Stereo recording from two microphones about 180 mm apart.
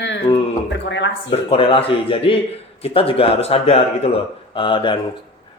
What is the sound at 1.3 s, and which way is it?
Speech, 30° left (ahead or behind).